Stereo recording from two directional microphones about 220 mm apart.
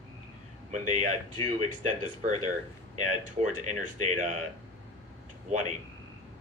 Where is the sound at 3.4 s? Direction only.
35° right (ahead or behind).